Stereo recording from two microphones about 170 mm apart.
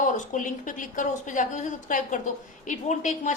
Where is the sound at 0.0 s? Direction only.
50° left (ahead or behind).